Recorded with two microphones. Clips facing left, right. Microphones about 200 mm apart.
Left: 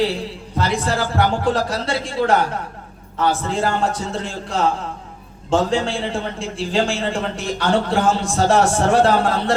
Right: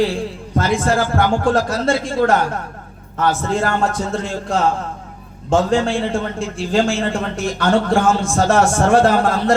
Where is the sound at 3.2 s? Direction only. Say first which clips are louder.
Right 1 dB; 45° right (ahead or behind).